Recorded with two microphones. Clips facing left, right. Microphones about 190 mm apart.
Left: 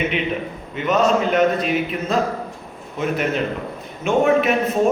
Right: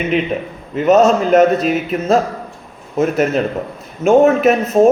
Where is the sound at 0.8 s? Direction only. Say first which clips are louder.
Right 7 dB; 40° right (ahead or behind).